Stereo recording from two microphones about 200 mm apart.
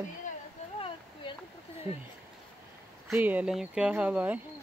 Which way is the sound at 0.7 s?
25° left (ahead or behind).